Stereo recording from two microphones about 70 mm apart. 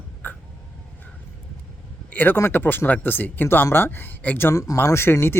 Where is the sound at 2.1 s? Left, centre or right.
Left.